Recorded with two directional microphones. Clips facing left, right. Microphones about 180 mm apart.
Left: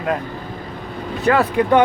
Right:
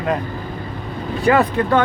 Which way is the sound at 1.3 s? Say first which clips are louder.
Right 1 dB; 10° right (ahead or behind).